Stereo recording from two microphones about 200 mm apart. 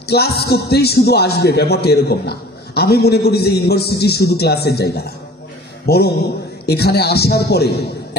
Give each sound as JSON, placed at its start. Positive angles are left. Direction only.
{"t": 0.1, "sound": "a man's voice", "side_deg": 55}